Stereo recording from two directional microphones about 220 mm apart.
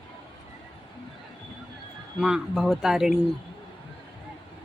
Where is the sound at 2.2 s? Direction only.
Centre (ahead or behind).